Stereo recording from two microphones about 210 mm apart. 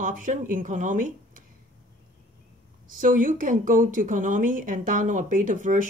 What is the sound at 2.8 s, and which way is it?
Speech, 40° right (ahead or behind).